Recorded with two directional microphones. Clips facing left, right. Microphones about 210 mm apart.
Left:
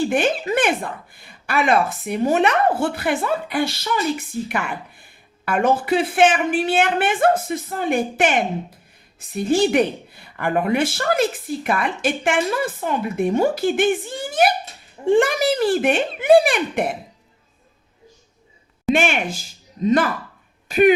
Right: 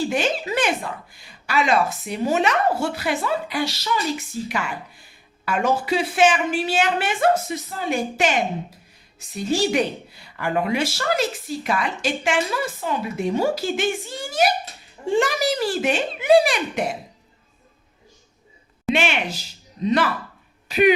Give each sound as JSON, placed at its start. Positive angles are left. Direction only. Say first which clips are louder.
{"t": 0.0, "sound": "speech", "louder": "left 3 dB", "side_deg": 55}
{"t": 18.9, "sound": "speech", "louder": "left 1 dB", "side_deg": 50}